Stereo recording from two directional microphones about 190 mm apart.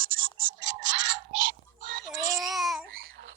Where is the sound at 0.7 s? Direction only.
70° right (ahead or behind).